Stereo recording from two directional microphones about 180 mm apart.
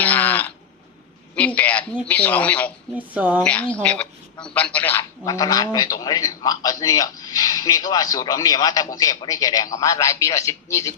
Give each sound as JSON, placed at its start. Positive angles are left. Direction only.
{"t": 0.0, "sound": "a sound", "side_deg": 10}
{"t": 1.4, "sound": "speech", "side_deg": 5}
{"t": 3.1, "sound": "speech", "side_deg": -10}
{"t": 3.4, "sound": "speech", "side_deg": 5}